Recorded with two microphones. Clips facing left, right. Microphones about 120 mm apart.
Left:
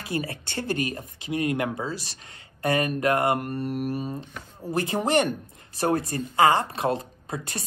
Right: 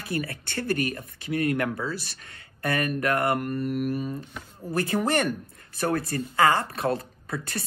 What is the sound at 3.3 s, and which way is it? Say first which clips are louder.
Mantra: right 1 dB; 40° left (ahead or behind).